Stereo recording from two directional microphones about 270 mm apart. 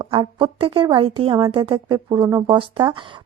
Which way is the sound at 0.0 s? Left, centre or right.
Centre.